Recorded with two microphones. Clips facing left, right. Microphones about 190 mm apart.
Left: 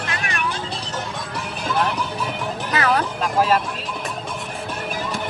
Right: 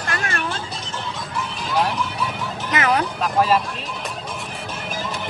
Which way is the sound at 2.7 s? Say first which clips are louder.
Even; 20° right (ahead or behind).